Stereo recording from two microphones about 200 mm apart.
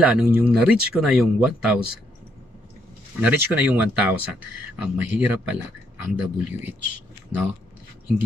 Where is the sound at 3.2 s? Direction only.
5° right (ahead or behind).